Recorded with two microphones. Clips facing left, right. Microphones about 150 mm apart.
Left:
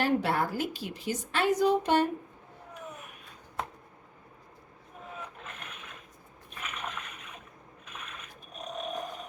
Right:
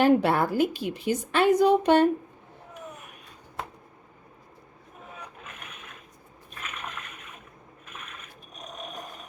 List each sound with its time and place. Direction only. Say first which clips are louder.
0.0 s a woman's voice: right 7 dB; 60° right (ahead or behind)